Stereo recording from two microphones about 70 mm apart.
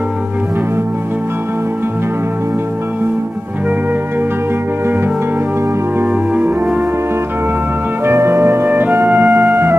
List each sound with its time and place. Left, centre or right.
6.3 s music: centre
8.0 s music: right